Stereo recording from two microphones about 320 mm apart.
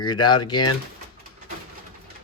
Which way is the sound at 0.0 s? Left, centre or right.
Centre.